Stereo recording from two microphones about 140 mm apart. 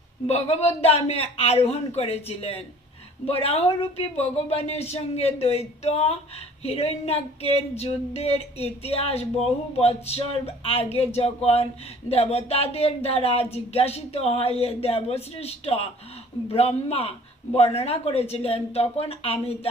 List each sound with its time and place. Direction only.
0.3 s speech: 50° left (ahead or behind)